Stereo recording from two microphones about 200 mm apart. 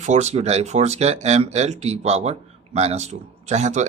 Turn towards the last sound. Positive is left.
turn(degrees=-35)  # may be behind; listen again after turning